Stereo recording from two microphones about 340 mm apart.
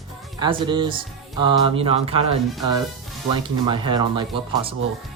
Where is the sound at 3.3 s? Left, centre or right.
Centre.